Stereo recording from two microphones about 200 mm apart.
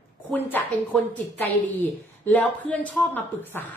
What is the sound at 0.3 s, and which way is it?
A woman's voice, 10° left (ahead or behind).